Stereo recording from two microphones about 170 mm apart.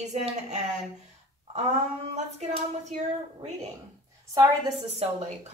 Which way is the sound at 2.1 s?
40° right (ahead or behind).